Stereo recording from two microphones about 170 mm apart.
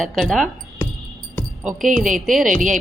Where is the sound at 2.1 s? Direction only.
Centre (ahead or behind).